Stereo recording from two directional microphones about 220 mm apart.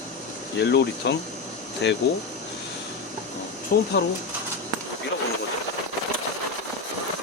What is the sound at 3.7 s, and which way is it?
Speech, 40° left (ahead or behind).